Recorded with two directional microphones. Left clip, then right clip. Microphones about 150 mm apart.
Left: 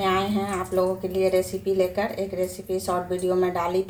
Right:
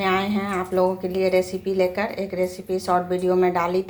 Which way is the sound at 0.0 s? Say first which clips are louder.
Right 1 dB; 15° right (ahead or behind).